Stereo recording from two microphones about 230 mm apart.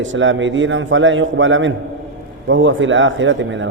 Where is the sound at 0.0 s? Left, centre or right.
Right.